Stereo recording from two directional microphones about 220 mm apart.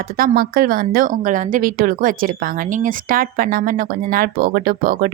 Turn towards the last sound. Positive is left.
turn(degrees=-40)  # may be behind; listen again after turning